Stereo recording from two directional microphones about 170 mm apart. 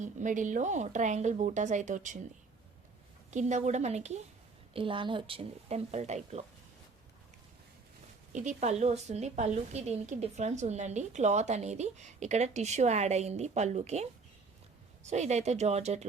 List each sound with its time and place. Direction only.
0.0 s a woman's voice: 50° right (ahead or behind)
3.3 s a woman's voice: 45° right (ahead or behind)
4.7 s a woman's voice: 30° right (ahead or behind)
8.3 s a woman's voice: 45° right (ahead or behind)